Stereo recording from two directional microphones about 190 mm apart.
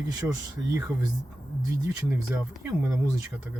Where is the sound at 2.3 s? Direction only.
10° right (ahead or behind).